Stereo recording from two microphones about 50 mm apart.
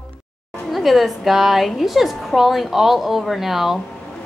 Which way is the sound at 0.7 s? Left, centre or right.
Centre.